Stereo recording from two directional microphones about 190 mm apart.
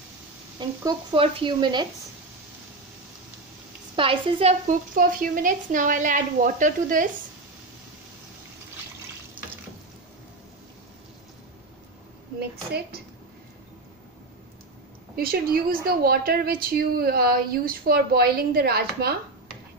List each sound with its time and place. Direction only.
0.6 s speech: 25° right (ahead or behind)
3.9 s a woman's voice: 30° right (ahead or behind); by 7.1 s 45° right (ahead or behind)
12.4 s a woman's voice: 55° right (ahead or behind)
15.1 s a woman's voice: 50° right (ahead or behind)